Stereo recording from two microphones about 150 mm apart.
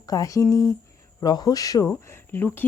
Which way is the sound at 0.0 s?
25° left (ahead or behind).